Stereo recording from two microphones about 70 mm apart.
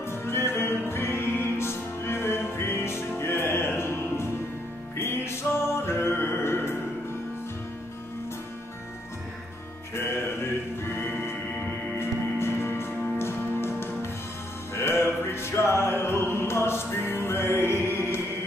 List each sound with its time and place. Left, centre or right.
0.0 s music: left
9.9 s music: left